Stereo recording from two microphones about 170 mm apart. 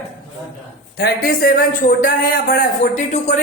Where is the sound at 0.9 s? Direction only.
65° left (ahead or behind).